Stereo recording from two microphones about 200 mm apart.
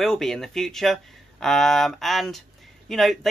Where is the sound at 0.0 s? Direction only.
Centre (ahead or behind).